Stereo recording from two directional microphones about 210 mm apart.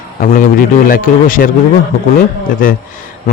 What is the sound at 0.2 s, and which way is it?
A man's voice, 40° left (ahead or behind).